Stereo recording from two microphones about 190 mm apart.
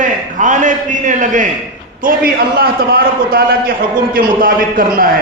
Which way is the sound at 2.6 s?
50° right (ahead or behind).